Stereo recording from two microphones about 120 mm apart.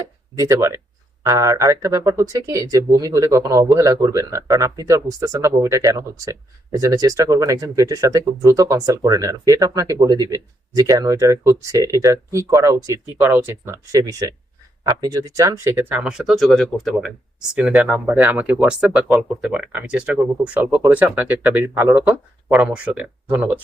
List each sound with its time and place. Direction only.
0.0 s speech: 25° right (ahead or behind); by 17.1 s centre (ahead or behind)
17.5 s speech: 10° right (ahead or behind)